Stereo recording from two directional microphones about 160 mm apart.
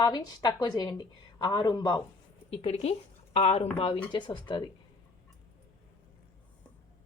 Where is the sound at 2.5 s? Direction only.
40° left (ahead or behind).